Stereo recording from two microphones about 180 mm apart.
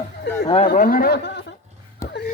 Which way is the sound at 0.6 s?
50° left (ahead or behind).